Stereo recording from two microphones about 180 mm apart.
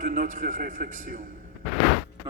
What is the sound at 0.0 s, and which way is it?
A man's voice, 45° right (ahead or behind).